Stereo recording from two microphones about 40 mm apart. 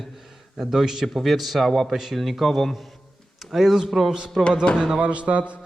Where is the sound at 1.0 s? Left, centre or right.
Centre.